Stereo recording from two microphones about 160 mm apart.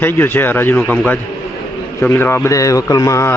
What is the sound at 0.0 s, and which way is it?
A man's voice, 15° left (ahead or behind).